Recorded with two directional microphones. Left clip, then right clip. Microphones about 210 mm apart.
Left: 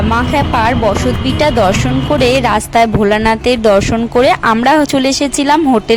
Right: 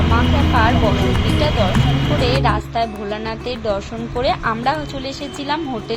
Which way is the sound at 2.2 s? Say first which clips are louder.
Left 7 dB; 60° left (ahead or behind).